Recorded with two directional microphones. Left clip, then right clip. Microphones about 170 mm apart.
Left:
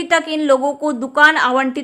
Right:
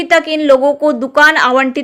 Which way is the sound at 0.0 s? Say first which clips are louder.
Right 5 dB; 20° right (ahead or behind).